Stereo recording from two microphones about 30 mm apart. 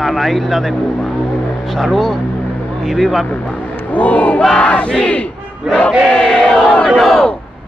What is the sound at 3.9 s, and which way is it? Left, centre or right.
Battle cry, left.